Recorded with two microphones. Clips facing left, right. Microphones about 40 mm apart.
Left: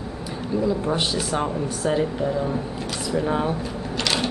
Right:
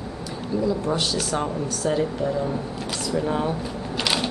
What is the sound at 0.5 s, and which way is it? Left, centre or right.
Speech, centre.